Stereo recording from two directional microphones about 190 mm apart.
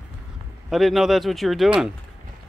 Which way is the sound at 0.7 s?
Centre (ahead or behind).